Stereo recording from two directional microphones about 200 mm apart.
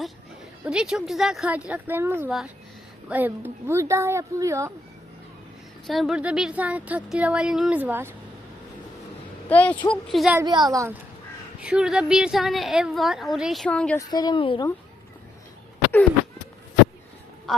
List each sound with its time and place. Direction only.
0.6 s a woman's voice: 5° right (ahead or behind)
5.9 s speech: centre (ahead or behind)
9.5 s a woman's voice: 10° left (ahead or behind)
10.3 s speech: 20° right (ahead or behind)
11.6 s a woman's voice: 5° right (ahead or behind)
14.1 s a woman's voice: 20° left (ahead or behind)
17.5 s a woman's voice: centre (ahead or behind)